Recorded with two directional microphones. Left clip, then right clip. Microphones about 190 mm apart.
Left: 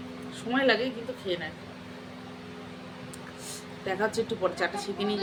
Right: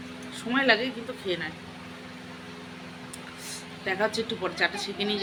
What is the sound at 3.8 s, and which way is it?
A woman's voice, centre (ahead or behind).